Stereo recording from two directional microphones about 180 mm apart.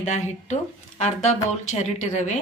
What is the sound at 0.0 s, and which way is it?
Speech, 40° left (ahead or behind).